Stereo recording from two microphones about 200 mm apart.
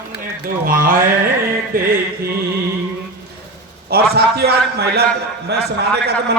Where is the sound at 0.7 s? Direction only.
45° right (ahead or behind).